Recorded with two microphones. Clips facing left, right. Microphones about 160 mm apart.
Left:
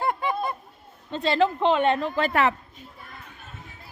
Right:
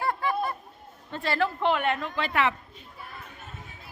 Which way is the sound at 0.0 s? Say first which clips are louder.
Left 1 dB; 20° left (ahead or behind).